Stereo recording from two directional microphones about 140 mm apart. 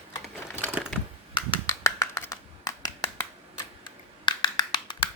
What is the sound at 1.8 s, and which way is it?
Hands, 20° left (ahead or behind).